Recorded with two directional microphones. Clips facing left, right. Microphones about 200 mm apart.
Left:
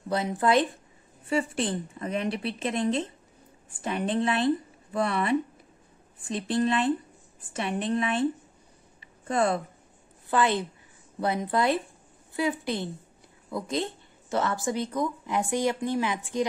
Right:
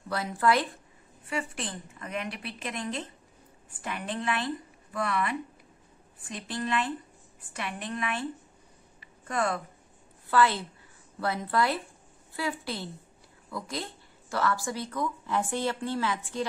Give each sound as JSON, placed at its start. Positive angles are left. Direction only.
{"t": 0.1, "sound": "speech", "side_deg": 20}
{"t": 9.0, "sound": "a sound", "side_deg": 25}
{"t": 10.3, "sound": "speech", "side_deg": 20}